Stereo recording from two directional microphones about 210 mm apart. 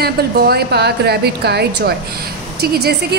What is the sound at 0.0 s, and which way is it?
A woman's voice, 50° right (ahead or behind).